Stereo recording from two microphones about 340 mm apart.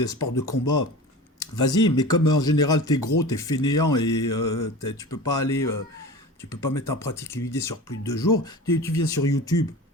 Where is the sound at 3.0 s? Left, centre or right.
Left.